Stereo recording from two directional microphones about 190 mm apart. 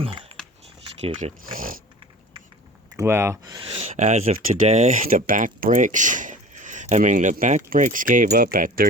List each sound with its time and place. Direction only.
0.0 s a sound: 30° right (ahead or behind)
1.0 s speech: 40° right (ahead or behind)
2.9 s speech: 15° right (ahead or behind)
3.6 s speech: 30° right (ahead or behind); by 8.9 s 50° right (ahead or behind)